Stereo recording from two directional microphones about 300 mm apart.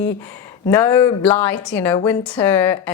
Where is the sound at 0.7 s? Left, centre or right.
Centre.